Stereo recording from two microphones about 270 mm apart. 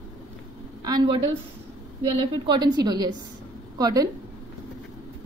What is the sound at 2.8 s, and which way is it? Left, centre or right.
A woman's voice, centre.